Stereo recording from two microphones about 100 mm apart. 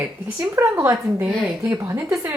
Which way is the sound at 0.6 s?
30° right (ahead or behind).